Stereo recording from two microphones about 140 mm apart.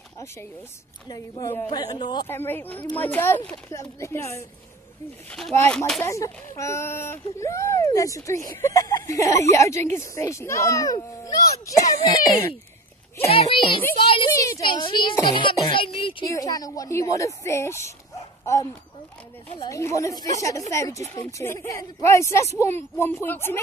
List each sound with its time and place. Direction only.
1.0 s speech: 30° left (ahead or behind)
2.2 s speech: 15° left (ahead or behind)
5.6 s speech: 15° left (ahead or behind)
13.3 s speech: 40° left (ahead or behind)
16.3 s speech: 25° left (ahead or behind)